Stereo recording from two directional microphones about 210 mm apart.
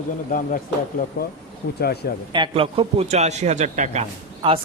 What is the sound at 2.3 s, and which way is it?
A man's voice, 25° right (ahead or behind).